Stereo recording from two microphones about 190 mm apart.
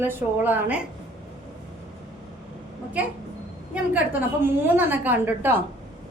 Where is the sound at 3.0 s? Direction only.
10° right (ahead or behind).